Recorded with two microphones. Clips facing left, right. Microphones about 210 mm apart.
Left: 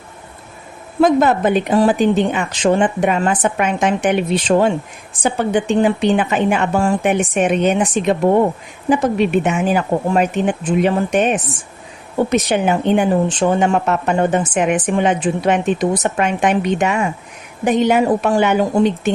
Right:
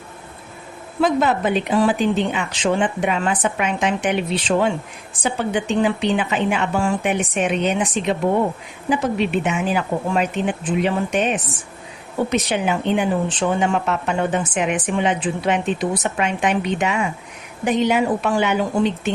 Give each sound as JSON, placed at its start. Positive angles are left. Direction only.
{"t": 1.0, "sound": "speech", "side_deg": 45}